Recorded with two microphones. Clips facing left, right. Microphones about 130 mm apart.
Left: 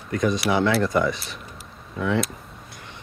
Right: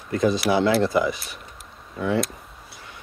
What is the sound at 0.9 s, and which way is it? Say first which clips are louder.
Speech: even; 5° right (ahead or behind).